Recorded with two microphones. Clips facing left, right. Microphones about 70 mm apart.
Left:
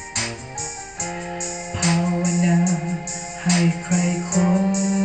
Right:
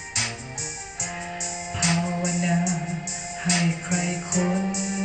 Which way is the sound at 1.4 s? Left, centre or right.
Left.